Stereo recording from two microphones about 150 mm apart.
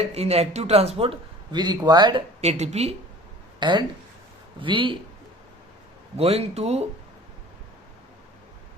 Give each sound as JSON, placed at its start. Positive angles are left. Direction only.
{"t": 0.1, "sound": "a man's voice", "side_deg": -45}
{"t": 2.4, "sound": "a man's voice", "side_deg": -45}
{"t": 3.6, "sound": "a man's voice", "side_deg": -30}
{"t": 6.1, "sound": "a man's voice", "side_deg": -45}